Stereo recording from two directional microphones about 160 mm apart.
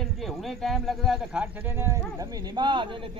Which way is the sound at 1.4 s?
15° right (ahead or behind).